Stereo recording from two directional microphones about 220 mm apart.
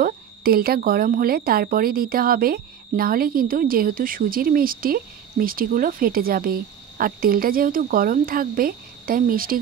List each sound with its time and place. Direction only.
0.0 s speech: 40° right (ahead or behind)